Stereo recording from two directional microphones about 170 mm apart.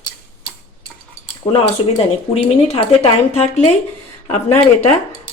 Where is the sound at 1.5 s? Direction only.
40° left (ahead or behind).